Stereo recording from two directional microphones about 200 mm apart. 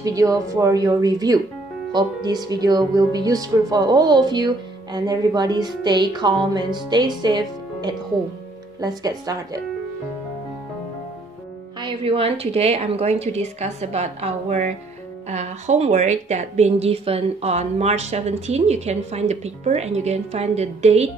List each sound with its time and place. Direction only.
0.0 s speech: 15° right (ahead or behind)
11.8 s a woman's voice: 25° right (ahead or behind)